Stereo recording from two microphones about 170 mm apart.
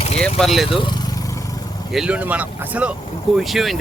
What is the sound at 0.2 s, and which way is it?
Speech, centre (ahead or behind).